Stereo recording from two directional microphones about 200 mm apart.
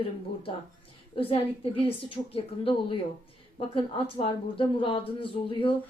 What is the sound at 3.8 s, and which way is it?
Speech, 25° left (ahead or behind).